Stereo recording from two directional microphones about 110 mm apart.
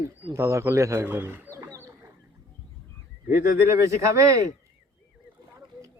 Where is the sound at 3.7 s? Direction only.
25° right (ahead or behind).